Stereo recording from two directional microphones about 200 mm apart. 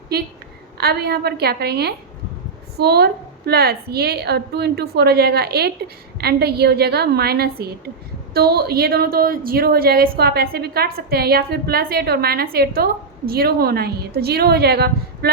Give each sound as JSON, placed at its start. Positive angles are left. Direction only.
{"t": 0.8, "sound": "a woman's voice", "side_deg": -55}